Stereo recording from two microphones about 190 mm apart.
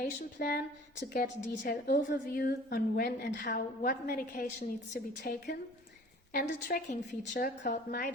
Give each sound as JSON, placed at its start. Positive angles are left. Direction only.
{"t": 0.0, "sound": "a woman's voice", "side_deg": 50}
{"t": 6.3, "sound": "a woman's voice", "side_deg": 50}